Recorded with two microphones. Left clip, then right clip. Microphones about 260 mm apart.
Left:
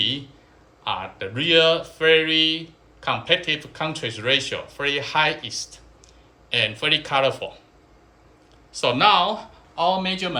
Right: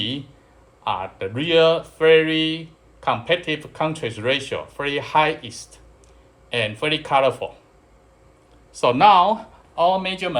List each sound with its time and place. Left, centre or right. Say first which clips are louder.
0.9 s speech: right 3 dB; right
8.7 s a man's voice: right 4 dB; right